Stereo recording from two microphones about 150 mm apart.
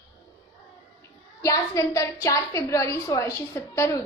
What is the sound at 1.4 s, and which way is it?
A woman's voice, 20° left (ahead or behind).